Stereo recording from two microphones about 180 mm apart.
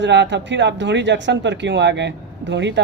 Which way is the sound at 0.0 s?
75° right (ahead or behind).